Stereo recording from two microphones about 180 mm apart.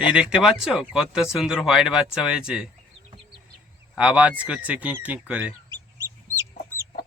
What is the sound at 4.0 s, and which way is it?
Speech, 5° right (ahead or behind).